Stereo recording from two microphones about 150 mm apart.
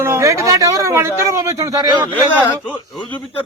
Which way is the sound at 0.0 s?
20° right (ahead or behind).